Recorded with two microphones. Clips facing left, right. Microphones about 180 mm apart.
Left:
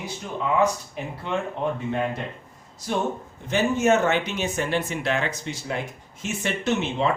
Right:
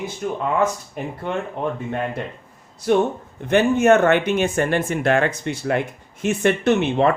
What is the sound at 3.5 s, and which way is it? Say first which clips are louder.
Speech: right 6 dB; 60° right (ahead or behind).